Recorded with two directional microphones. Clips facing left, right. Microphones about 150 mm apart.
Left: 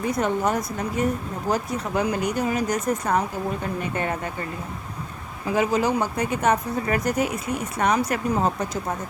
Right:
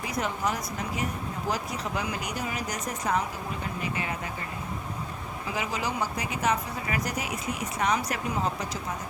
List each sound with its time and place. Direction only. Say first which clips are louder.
0.0 s speech: left 7 dB; 50° left (ahead or behind)
5.5 s speech: left 9 dB; 45° left (ahead or behind)